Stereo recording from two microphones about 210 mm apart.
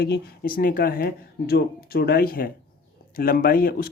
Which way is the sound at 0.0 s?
45° left (ahead or behind).